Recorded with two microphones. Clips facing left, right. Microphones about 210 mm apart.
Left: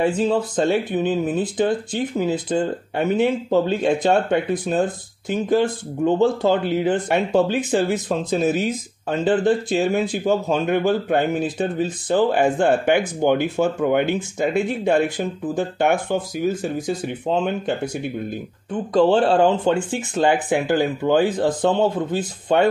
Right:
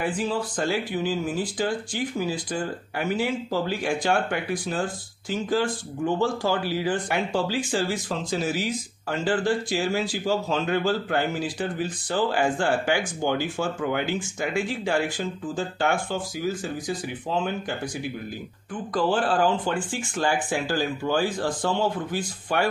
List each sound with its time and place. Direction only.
0.0 s speech: 25° left (ahead or behind)